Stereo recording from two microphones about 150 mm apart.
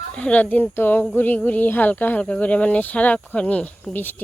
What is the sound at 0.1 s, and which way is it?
Speech, 10° left (ahead or behind).